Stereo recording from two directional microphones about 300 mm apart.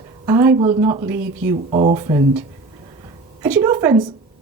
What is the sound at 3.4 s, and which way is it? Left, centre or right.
Speech, centre.